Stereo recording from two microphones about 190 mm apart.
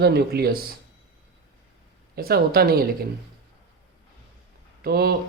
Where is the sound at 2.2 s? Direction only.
55° right (ahead or behind).